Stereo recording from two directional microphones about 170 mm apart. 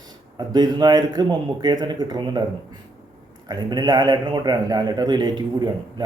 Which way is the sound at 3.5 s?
25° right (ahead or behind).